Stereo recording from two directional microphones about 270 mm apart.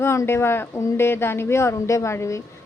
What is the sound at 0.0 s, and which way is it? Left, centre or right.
Speech, centre.